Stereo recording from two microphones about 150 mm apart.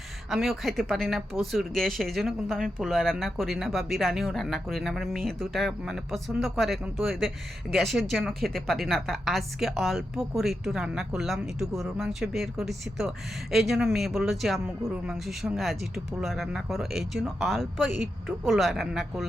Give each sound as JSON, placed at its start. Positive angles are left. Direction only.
{"t": 0.3, "sound": "a woman's voice", "side_deg": 0}